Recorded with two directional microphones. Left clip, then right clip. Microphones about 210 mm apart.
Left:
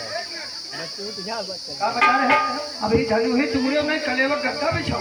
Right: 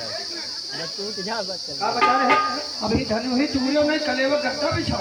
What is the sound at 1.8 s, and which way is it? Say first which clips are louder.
Speech: left 1 dB; 25° left (ahead or behind).